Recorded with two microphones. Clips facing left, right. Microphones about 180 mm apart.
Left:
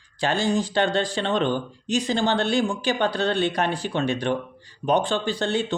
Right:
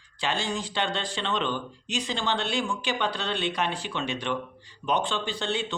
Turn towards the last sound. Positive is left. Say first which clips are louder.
# left 6 dB
turn(degrees=40)  # may be behind; listen again after turning